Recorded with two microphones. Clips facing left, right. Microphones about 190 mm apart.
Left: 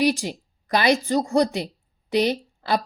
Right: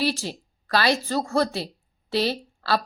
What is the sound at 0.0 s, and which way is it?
A woman's voice, 15° left (ahead or behind).